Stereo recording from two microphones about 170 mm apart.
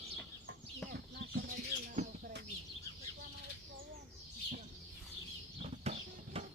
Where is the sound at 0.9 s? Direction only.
65° right (ahead or behind).